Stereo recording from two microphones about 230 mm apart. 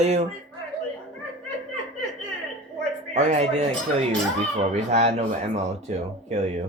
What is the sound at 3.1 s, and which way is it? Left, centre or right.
Speech, right.